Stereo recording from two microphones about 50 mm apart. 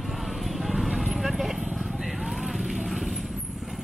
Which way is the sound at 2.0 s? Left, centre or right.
Centre.